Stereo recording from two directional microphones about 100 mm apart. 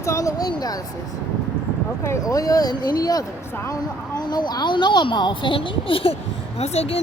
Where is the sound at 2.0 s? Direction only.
30° left (ahead or behind); by 6.1 s 65° left (ahead or behind).